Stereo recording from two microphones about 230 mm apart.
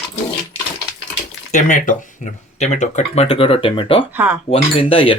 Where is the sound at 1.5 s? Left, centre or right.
Left.